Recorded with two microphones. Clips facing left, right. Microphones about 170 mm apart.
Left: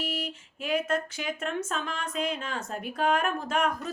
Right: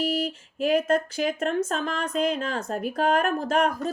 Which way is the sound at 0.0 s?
35° right (ahead or behind).